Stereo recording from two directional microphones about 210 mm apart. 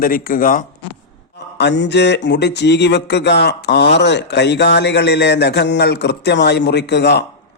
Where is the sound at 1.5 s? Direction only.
55° left (ahead or behind).